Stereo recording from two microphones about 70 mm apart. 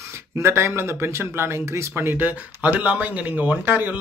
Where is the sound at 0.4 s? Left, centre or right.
Right.